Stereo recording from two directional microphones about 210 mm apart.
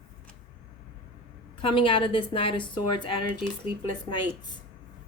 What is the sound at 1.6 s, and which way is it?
Speech, 25° left (ahead or behind).